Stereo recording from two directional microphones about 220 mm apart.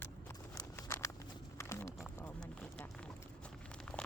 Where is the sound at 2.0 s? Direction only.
5° left (ahead or behind).